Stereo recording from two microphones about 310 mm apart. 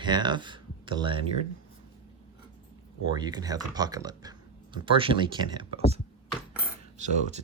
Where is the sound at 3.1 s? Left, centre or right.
Centre.